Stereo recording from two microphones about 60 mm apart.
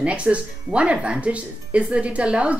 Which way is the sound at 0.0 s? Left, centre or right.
Right.